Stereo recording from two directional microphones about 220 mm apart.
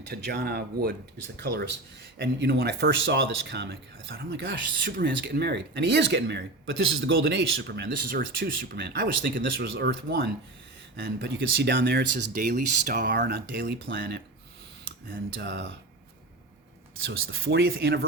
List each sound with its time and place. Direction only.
0.1 s speech: 45° right (ahead or behind)
4.8 s speech: 45° right (ahead or behind)
15.4 s speech: 50° right (ahead or behind)
17.0 s speech: 55° right (ahead or behind)